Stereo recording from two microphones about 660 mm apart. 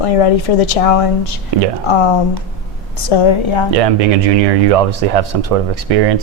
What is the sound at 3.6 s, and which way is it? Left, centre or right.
Speech, right.